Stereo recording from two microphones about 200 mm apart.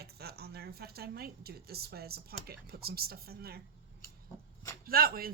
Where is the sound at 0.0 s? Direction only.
50° right (ahead or behind).